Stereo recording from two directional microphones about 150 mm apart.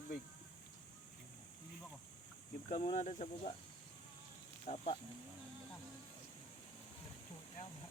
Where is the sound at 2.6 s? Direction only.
45° left (ahead or behind).